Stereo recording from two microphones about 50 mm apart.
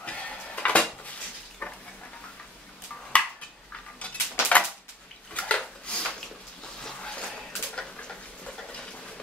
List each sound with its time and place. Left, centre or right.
0.0 s dishes: left
1.6 s stir: left
4.0 s cutlery: left
5.3 s dishes: left
6.8 s a sound: centre